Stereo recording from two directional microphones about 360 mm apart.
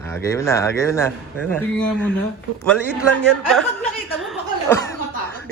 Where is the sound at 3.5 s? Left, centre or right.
Centre.